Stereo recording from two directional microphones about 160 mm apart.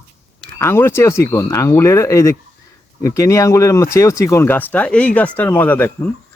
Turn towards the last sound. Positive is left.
turn(degrees=10)  # may be behind; listen again after turning